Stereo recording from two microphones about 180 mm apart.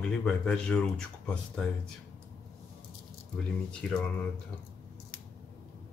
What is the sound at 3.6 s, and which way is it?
Speech, 5° left (ahead or behind).